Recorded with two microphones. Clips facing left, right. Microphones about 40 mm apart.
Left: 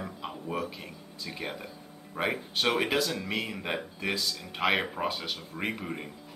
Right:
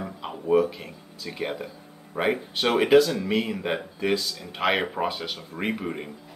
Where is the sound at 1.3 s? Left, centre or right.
Centre.